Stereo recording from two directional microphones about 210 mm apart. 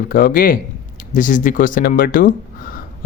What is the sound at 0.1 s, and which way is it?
Speech, 40° left (ahead or behind).